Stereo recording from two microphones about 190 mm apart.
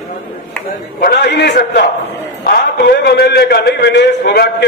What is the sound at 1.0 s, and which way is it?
A man's voice, 60° left (ahead or behind).